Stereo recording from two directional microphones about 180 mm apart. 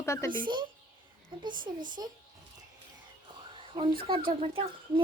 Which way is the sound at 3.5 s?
30° right (ahead or behind).